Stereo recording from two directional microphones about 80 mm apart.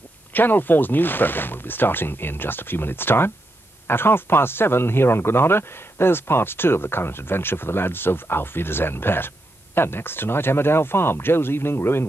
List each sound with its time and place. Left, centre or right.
0.3 s speech: left